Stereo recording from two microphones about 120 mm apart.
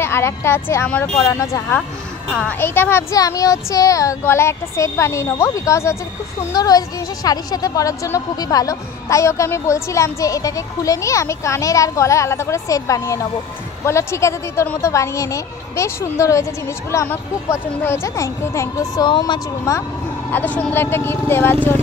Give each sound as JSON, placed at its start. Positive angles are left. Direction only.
{"t": 0.0, "sound": "a woman's voice", "side_deg": 20}
{"t": 1.1, "sound": "a woman's voice", "side_deg": 30}
{"t": 19.0, "sound": "speech", "side_deg": 40}
{"t": 19.7, "sound": "a woman's voice", "side_deg": 25}
{"t": 20.2, "sound": "a woman's voice", "side_deg": 15}